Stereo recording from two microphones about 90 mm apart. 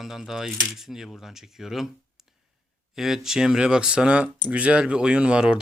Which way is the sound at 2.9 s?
5° right (ahead or behind).